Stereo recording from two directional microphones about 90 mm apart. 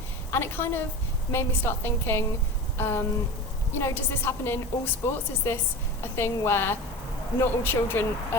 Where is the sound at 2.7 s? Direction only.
25° left (ahead or behind).